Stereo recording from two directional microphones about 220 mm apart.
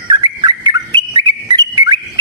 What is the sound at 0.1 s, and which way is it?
Whistle, 20° right (ahead or behind).